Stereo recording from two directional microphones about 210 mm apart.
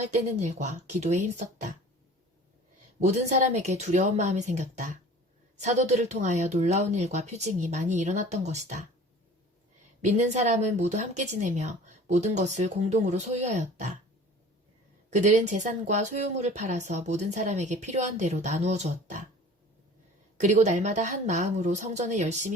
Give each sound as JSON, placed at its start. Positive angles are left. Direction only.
{"t": 0.1, "sound": "speech", "side_deg": -35}
{"t": 3.0, "sound": "speech", "side_deg": -35}
{"t": 10.0, "sound": "speech", "side_deg": -35}
{"t": 15.1, "sound": "speech", "side_deg": -35}
{"t": 20.4, "sound": "speech", "side_deg": -35}